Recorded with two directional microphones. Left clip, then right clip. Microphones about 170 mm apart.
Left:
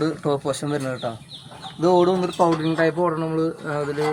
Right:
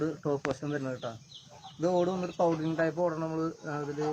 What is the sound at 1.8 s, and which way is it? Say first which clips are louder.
Speech: left 11 dB; 5° left (ahead or behind).